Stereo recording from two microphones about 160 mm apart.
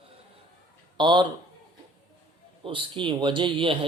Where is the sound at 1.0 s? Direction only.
30° right (ahead or behind).